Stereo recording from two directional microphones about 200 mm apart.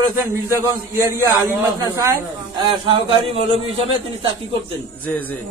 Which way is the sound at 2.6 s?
25° right (ahead or behind).